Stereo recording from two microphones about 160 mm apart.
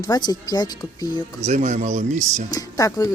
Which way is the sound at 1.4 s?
45° right (ahead or behind).